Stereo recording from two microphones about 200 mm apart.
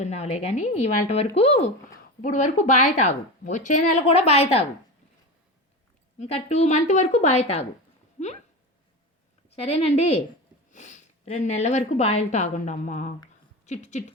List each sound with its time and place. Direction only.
0.0 s speech: 35° left (ahead or behind)
6.1 s speech: 30° left (ahead or behind)
9.6 s speech: 30° left (ahead or behind)